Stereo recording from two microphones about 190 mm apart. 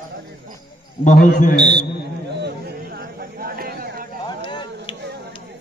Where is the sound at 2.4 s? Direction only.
55° right (ahead or behind).